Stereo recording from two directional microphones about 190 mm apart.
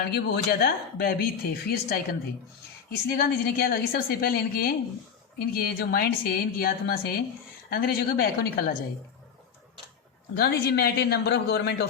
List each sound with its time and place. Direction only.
0.0 s a woman's voice: 55° left (ahead or behind)
10.3 s speech: 55° left (ahead or behind)